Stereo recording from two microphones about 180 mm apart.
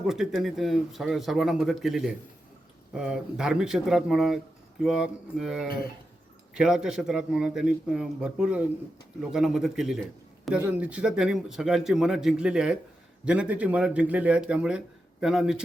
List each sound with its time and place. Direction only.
0.1 s a man's voice: centre (ahead or behind)
5.6 s speech: 55° left (ahead or behind)
6.5 s a man's voice: 5° right (ahead or behind)